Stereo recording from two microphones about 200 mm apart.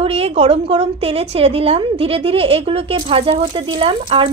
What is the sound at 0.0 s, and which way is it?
A woman's voice, 30° right (ahead or behind).